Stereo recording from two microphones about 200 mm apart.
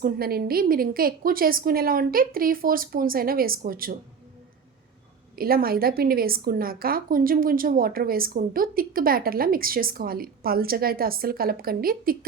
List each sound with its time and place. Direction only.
0.0 s a woman's voice: 50° right (ahead or behind)
5.4 s a woman's voice: 45° right (ahead or behind)